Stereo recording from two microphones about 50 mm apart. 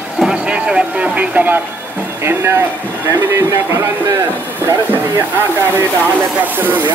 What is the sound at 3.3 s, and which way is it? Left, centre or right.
Speech, right.